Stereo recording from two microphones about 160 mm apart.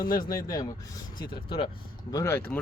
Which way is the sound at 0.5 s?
25° left (ahead or behind).